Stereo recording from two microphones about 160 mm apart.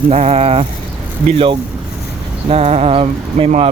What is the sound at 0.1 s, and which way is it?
Speech, 40° right (ahead or behind).